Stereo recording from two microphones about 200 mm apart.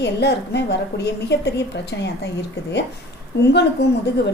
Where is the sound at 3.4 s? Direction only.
55° left (ahead or behind).